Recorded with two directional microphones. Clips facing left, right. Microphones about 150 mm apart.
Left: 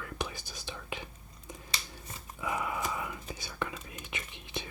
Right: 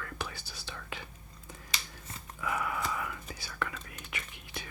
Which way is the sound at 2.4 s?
20° left (ahead or behind).